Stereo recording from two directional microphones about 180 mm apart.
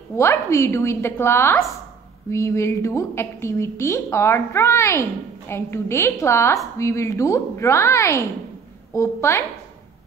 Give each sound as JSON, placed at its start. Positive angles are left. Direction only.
{"t": 0.1, "sound": "a woman's voice", "side_deg": 15}